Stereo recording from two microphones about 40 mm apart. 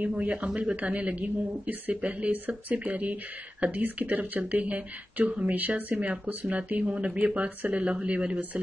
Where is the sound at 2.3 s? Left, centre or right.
Right.